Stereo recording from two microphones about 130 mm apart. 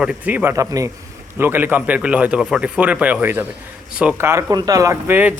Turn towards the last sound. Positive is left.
turn(degrees=-15)  # may be behind; listen again after turning